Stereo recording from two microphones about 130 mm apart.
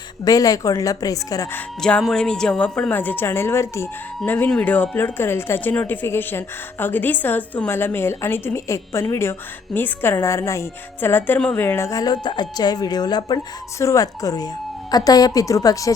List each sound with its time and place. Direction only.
0.3 s speech: 25° left (ahead or behind)
1.8 s speech: 5° left (ahead or behind); by 15.9 s 25° left (ahead or behind)